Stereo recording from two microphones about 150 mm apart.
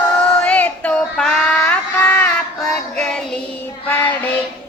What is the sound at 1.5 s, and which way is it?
Synthetic singing, 15° left (ahead or behind).